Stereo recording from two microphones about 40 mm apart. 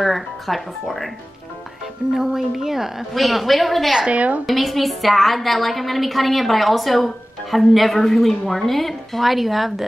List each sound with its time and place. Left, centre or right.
0.0 s a woman's voice: centre
2.1 s a woman's voice: centre
4.1 s a woman's voice: right
4.5 s a woman's voice: centre